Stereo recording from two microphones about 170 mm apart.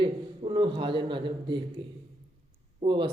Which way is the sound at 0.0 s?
30° right (ahead or behind).